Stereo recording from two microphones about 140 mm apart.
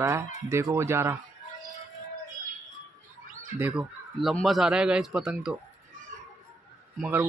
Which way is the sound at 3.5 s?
15° right (ahead or behind).